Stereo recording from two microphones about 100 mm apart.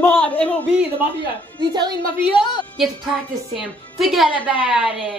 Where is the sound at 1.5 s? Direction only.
45° right (ahead or behind).